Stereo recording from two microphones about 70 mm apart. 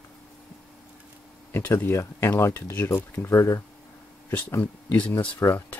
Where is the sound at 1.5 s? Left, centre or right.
Left.